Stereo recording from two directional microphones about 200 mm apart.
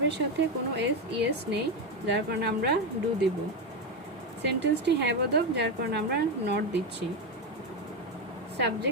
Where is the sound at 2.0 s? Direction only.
60° right (ahead or behind).